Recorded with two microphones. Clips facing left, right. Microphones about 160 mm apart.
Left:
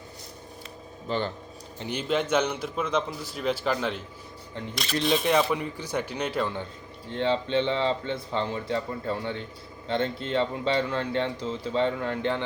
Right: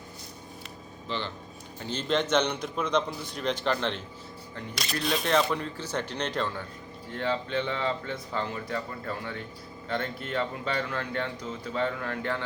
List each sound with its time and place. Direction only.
1.0 s speech: 45° left (ahead or behind)
1.8 s a man's voice: 15° left (ahead or behind)
5.2 s speech: 10° left (ahead or behind)
7.1 s speech: 25° left (ahead or behind)